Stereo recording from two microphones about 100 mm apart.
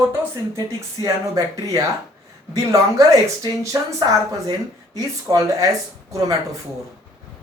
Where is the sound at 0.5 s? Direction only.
35° right (ahead or behind).